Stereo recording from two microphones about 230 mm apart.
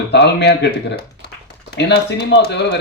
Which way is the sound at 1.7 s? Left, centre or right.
Left.